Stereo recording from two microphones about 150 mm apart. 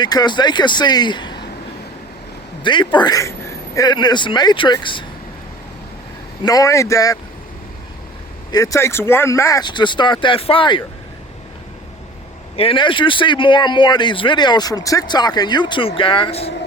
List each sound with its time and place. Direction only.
0.0 s speech: 30° left (ahead or behind)
2.6 s speech: 30° left (ahead or behind)
6.4 s speech: 25° left (ahead or behind)
8.5 s speech: 20° left (ahead or behind)
12.5 s speech: 35° left (ahead or behind)